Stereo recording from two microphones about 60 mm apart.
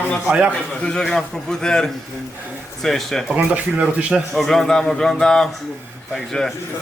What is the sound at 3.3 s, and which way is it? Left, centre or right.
Speech, right.